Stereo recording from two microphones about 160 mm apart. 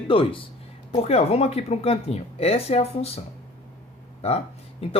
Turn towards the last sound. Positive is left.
turn(degrees=40)  # may be behind; listen again after turning